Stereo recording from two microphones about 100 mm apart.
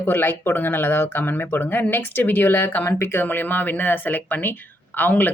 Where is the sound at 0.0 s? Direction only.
20° left (ahead or behind).